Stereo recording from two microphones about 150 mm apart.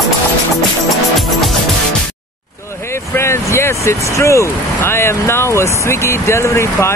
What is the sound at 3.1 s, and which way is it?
Speech, 15° left (ahead or behind).